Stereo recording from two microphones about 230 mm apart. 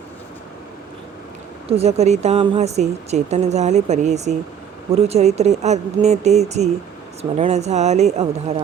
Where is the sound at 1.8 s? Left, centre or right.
Right.